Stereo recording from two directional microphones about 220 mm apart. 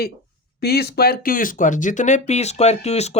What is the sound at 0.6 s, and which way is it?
Speech, 45° left (ahead or behind).